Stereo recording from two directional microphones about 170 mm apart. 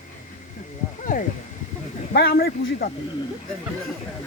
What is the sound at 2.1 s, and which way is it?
Speech, 60° left (ahead or behind).